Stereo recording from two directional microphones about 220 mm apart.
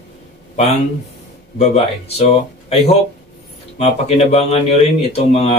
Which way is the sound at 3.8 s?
30° left (ahead or behind).